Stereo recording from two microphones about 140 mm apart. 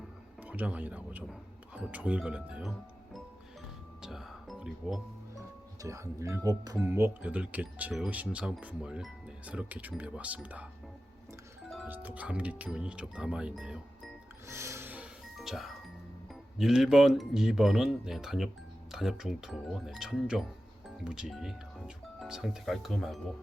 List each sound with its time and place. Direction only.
0.4 s speech: 10° right (ahead or behind)
4.0 s music: centre (ahead or behind)
5.8 s speech: 20° right (ahead or behind)
11.9 s speech: 10° right (ahead or behind)
14.4 s music: 20° right (ahead or behind); by 15.7 s centre (ahead or behind)
16.3 s speech: 5° right (ahead or behind)